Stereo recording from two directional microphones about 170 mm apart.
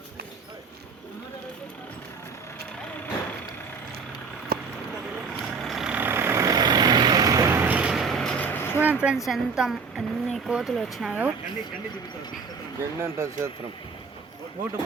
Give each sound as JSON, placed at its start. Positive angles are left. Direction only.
{"t": 5.4, "sound": "vehicle", "side_deg": 0}
{"t": 8.8, "sound": "speech", "side_deg": -10}
{"t": 13.0, "sound": "speech", "side_deg": -15}